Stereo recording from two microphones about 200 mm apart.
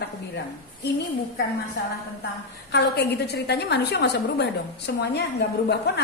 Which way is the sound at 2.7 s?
55° left (ahead or behind).